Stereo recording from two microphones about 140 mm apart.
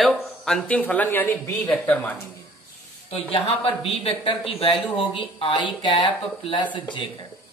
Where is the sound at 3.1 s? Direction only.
40° left (ahead or behind).